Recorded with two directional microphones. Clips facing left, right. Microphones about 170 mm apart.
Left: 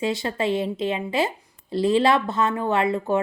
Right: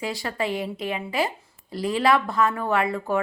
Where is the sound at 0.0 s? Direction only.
25° left (ahead or behind).